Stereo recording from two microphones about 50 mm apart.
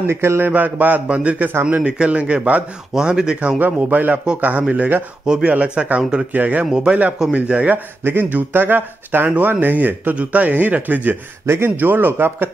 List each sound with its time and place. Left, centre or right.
0.0 s a sound: right
0.5 s a man's voice: right
1.5 s a man's voice: right
1.8 s speech: right
2.9 s speech: centre
3.5 s a man's voice: right
6.6 s speech: centre
8.0 s a man's voice: right
11.4 s a sound: right
11.7 s speech: right